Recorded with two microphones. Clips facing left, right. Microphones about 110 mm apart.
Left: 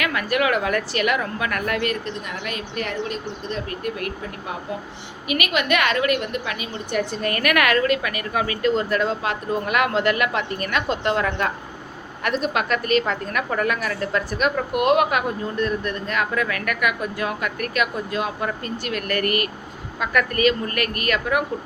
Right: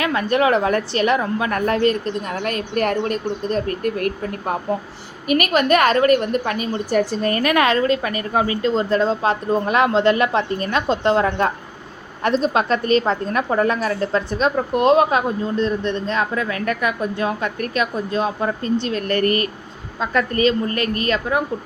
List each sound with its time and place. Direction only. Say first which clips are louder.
0.0 s a woman's voice: right 4 dB; 30° right (ahead or behind)